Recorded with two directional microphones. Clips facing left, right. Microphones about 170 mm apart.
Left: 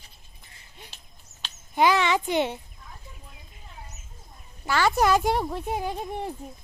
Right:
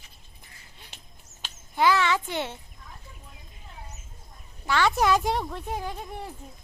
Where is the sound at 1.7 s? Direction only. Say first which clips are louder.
Left 1 dB; 20° left (ahead or behind).